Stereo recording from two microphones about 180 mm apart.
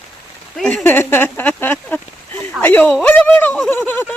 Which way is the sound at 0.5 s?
5° left (ahead or behind).